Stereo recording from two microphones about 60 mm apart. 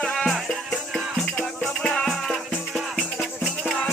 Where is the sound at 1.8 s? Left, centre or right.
Centre.